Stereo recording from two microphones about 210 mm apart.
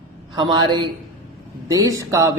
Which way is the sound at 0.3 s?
20° right (ahead or behind).